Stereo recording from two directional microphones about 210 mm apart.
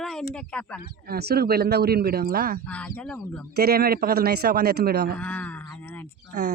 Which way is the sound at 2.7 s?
5° left (ahead or behind).